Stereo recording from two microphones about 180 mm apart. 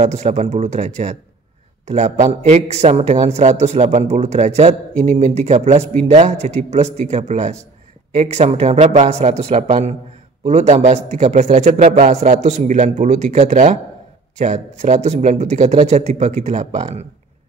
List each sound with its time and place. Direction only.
0.0 s a man's voice: 40° right (ahead or behind)